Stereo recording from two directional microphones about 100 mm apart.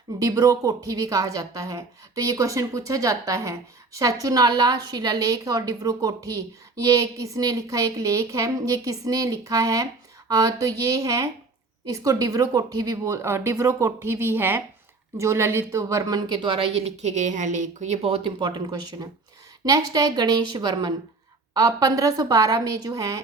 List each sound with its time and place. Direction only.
0.2 s a woman's voice: 35° right (ahead or behind); by 17.1 s 90° right
18.0 s a woman's voice: 70° right (ahead or behind); by 23.2 s 35° right (ahead or behind)